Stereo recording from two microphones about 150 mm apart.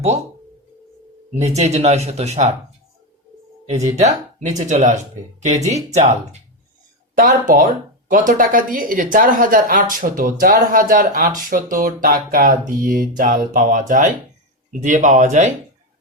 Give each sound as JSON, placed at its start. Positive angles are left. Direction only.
{"t": 1.4, "sound": "speech", "side_deg": -50}
{"t": 3.7, "sound": "speech", "side_deg": -50}
{"t": 7.2, "sound": "speech", "side_deg": -65}